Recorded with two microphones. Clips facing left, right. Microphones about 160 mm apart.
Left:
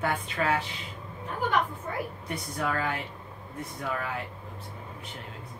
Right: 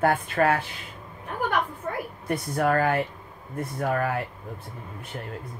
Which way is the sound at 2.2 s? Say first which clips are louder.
Right 11 dB; 55° right (ahead or behind).